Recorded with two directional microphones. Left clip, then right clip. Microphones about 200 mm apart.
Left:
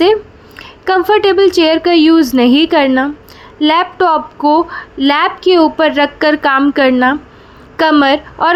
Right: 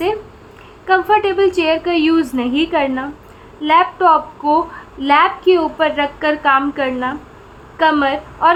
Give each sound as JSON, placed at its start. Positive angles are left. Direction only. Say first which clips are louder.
{"t": 0.9, "sound": "a woman's voice", "louder": "left 3 dB", "side_deg": 35}